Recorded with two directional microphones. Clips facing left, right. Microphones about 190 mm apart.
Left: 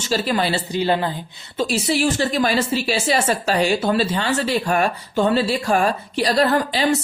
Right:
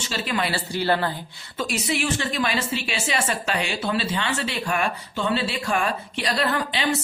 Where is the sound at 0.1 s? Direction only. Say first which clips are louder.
Left 6 dB; 35° left (ahead or behind); by 1.1 s 15° left (ahead or behind).